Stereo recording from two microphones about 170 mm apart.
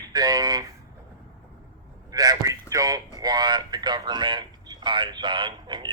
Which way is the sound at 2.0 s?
25° right (ahead or behind).